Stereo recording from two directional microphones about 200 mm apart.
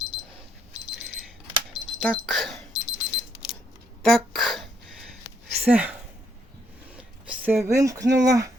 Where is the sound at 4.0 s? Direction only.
Centre (ahead or behind).